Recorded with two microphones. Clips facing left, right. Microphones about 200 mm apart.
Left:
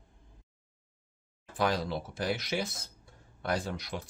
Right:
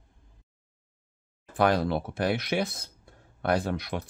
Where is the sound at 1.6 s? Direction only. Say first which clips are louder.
Right 6 dB; 60° right (ahead or behind).